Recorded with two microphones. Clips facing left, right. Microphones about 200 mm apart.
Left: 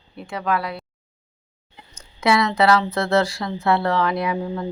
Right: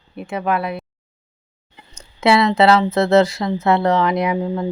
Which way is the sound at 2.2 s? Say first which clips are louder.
Right 4 dB; 25° right (ahead or behind).